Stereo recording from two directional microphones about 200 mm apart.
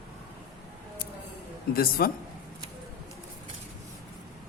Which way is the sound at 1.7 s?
45° left (ahead or behind).